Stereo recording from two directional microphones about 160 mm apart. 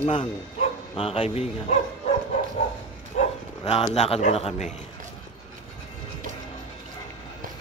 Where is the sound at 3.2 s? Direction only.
40° left (ahead or behind).